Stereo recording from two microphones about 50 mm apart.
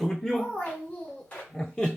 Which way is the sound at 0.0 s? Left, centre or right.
Centre.